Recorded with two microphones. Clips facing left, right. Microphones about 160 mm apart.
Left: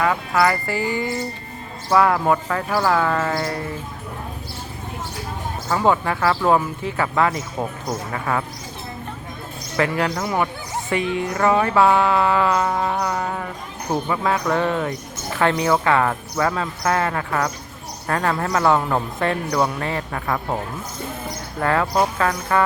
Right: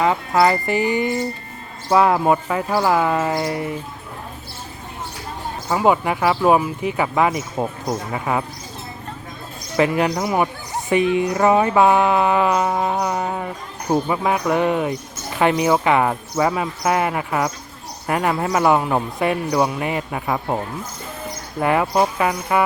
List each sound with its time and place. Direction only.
0.0 s speech: 25° right (ahead or behind)
5.6 s speech: 15° right (ahead or behind)
9.7 s speech: 20° right (ahead or behind)
21.6 s speech: 15° right (ahead or behind)